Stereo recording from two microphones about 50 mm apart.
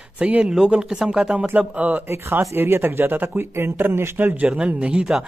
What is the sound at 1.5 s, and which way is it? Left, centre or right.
Speech, right.